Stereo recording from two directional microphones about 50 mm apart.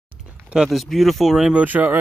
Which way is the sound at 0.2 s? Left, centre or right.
Centre.